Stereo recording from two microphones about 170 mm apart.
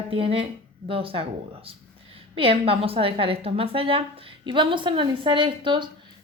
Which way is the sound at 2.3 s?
35° right (ahead or behind).